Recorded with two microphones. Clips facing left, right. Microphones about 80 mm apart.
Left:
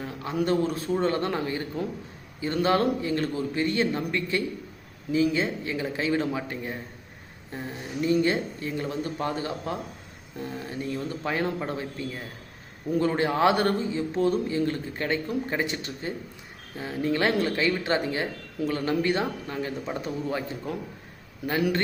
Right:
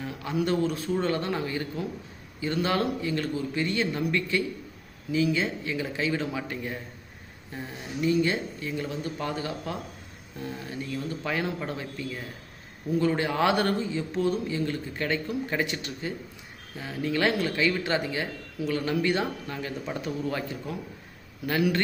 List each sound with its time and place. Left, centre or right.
0.3 s speech: left